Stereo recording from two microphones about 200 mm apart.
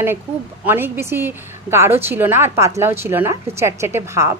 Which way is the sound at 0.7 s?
10° right (ahead or behind).